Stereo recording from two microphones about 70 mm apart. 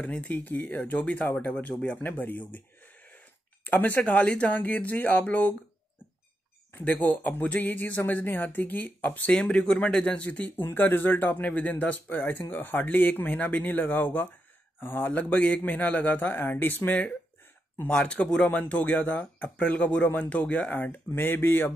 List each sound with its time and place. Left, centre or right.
0.0 s speech: centre
2.5 s a sound: left
3.6 s speech: left
6.7 s speech: left
9.3 s speech: centre; by 16.9 s left
17.8 s speech: centre